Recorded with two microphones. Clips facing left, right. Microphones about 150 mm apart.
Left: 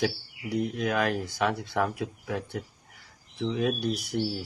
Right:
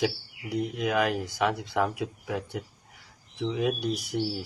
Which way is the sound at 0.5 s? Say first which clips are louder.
Even; 15° right (ahead or behind).